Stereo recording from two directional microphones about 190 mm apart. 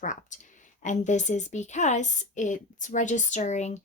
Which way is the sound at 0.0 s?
40° left (ahead or behind).